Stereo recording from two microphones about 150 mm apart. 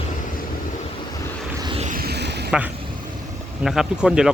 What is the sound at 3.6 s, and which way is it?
Speech, centre (ahead or behind).